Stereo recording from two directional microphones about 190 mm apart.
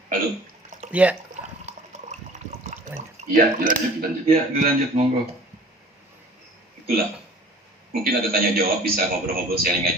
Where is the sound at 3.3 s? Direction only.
45° right (ahead or behind).